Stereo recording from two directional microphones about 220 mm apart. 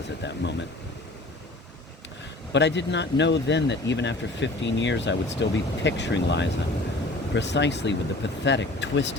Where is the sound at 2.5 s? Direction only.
55° left (ahead or behind).